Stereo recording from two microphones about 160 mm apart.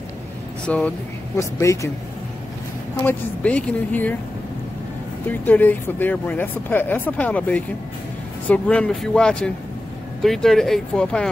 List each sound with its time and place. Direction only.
0.7 s speech: 5° left (ahead or behind)
1.3 s speech: 20° left (ahead or behind)
3.0 s speech: 10° left (ahead or behind)
5.4 s speech: 10° left (ahead or behind)